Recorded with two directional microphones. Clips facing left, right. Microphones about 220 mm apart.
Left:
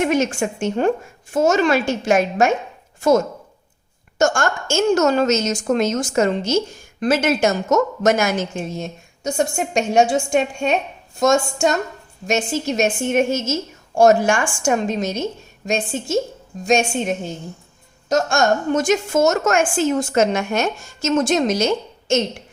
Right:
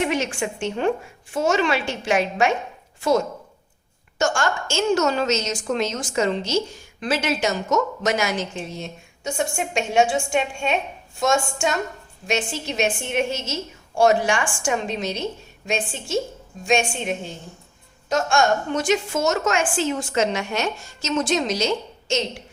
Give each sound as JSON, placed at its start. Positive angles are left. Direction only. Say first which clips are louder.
{"t": 0.0, "sound": "a woman's voice", "louder": "left 5 dB", "side_deg": 45}